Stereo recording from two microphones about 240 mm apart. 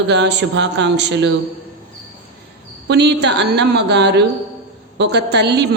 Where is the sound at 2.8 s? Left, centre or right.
Right.